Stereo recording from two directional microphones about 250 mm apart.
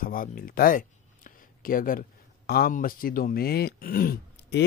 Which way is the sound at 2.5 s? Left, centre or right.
Left.